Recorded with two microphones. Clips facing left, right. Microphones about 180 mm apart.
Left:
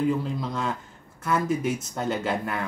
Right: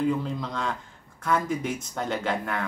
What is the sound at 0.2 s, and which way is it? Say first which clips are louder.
Speech: left 1 dB; 5° left (ahead or behind).